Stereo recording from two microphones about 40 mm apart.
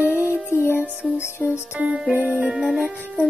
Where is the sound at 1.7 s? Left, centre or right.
Right.